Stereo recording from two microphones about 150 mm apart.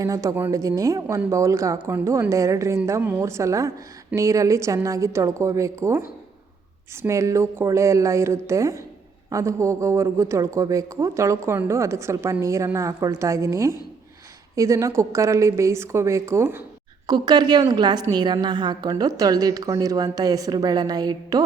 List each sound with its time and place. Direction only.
0.0 s speech: 20° right (ahead or behind)
17.1 s speech: 25° right (ahead or behind)